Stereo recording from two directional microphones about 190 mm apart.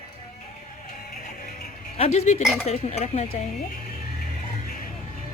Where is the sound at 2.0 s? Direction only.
35° left (ahead or behind).